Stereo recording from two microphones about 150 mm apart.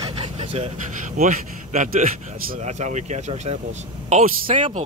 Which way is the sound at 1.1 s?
60° right (ahead or behind).